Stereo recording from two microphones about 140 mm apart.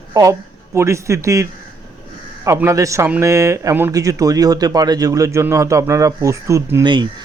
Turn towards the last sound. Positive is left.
turn(degrees=-35)  # may be behind; listen again after turning